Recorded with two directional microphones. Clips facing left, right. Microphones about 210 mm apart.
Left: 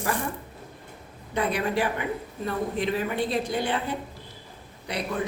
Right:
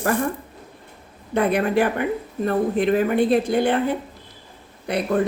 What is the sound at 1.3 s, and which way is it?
Speech, 55° right (ahead or behind).